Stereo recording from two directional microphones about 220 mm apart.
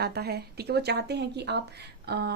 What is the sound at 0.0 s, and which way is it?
Speech, 45° right (ahead or behind).